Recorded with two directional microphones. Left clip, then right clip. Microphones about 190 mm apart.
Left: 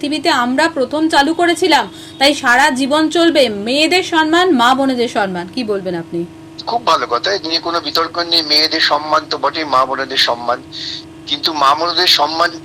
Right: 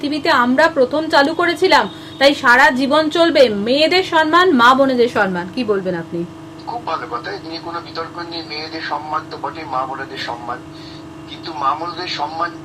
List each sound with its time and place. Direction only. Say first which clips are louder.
0.0 s a woman's voice: even; 30° left (ahead or behind)
6.8 s a man's voice: left 10 dB; 65° left (ahead or behind)